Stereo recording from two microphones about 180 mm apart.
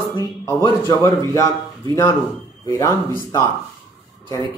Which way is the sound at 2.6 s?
15° left (ahead or behind).